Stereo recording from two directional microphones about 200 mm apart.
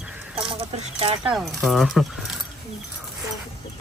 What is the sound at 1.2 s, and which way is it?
Speech, centre (ahead or behind).